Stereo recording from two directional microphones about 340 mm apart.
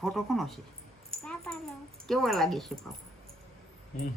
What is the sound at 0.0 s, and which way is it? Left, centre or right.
A woman's voice, centre.